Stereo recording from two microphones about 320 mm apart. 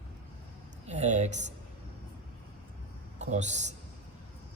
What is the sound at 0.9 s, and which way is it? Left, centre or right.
Speech, right.